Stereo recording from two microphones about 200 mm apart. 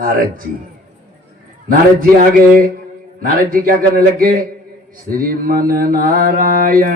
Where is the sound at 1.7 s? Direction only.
45° right (ahead or behind).